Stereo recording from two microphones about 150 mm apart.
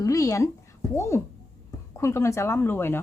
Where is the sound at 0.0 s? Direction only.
20° left (ahead or behind).